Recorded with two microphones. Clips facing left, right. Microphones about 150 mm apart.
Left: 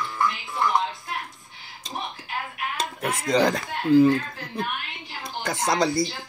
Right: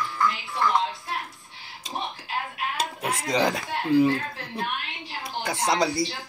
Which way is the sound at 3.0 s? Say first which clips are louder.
Left 3 dB; 10° right (ahead or behind).